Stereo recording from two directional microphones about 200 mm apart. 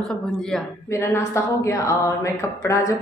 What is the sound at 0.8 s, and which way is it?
Speech, 15° left (ahead or behind).